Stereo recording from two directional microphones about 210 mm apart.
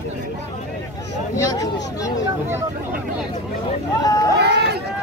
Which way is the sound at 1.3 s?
15° left (ahead or behind).